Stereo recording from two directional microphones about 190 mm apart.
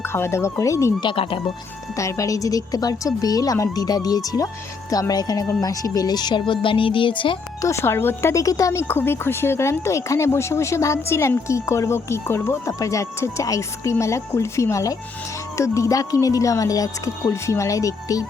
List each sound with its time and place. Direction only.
0.0 s speech: 15° left (ahead or behind)
1.1 s speech: 30° left (ahead or behind)
2.0 s speech: 15° left (ahead or behind)
7.7 s speech: 15° left (ahead or behind)